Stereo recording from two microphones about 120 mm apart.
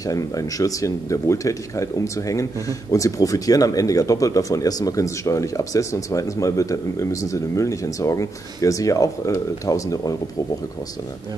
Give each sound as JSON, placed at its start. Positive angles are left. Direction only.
{"t": 0.0, "sound": "speech", "side_deg": 30}